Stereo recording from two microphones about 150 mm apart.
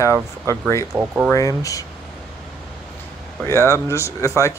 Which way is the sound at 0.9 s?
10° right (ahead or behind).